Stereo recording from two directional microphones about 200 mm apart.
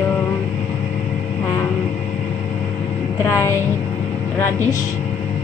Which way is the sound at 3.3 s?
15° left (ahead or behind).